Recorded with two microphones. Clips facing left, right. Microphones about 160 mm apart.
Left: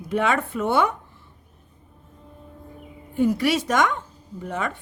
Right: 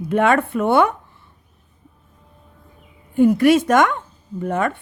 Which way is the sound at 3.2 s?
55° right (ahead or behind).